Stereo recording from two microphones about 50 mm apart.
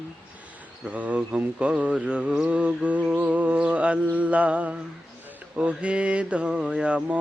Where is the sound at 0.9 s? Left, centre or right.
Right.